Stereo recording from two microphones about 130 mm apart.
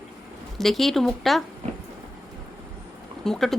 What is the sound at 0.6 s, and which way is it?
Speech, centre (ahead or behind).